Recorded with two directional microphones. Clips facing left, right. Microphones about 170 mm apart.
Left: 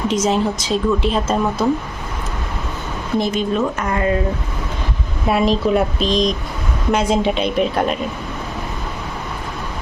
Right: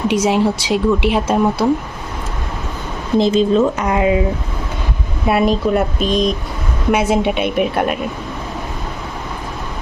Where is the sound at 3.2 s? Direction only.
25° right (ahead or behind).